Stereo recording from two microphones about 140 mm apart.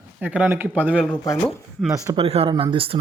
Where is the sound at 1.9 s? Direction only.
25° right (ahead or behind).